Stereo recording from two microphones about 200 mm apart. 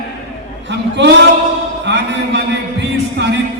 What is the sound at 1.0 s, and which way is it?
Speech, 65° right (ahead or behind).